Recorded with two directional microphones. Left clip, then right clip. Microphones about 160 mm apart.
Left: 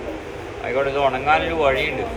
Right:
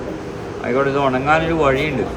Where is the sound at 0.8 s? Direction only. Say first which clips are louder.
Right 2 dB; 70° right (ahead or behind).